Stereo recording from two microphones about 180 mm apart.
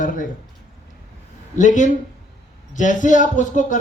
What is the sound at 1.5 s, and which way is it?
Speech, 45° left (ahead or behind).